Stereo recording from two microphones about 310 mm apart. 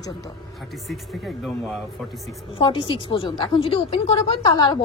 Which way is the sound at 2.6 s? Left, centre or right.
Centre.